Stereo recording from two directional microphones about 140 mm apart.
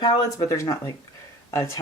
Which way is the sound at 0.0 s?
30° left (ahead or behind).